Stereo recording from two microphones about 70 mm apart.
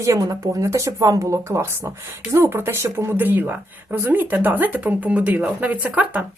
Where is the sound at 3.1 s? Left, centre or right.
Right.